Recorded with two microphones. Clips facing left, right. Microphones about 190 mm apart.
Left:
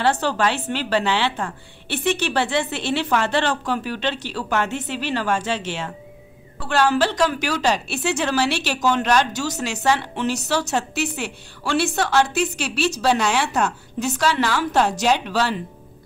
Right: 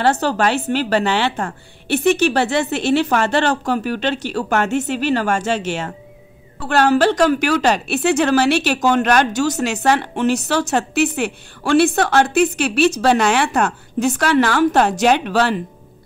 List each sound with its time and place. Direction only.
0.0 s a woman's voice: 40° right (ahead or behind)